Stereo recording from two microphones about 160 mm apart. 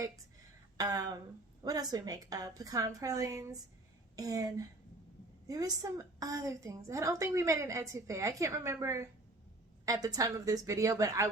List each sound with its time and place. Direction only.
0.8 s a woman's voice: 25° right (ahead or behind)